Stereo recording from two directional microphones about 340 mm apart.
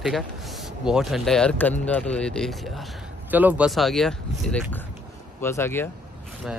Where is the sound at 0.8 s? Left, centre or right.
Centre.